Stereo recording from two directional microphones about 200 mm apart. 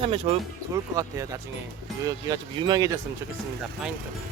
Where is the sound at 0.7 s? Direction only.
15° right (ahead or behind).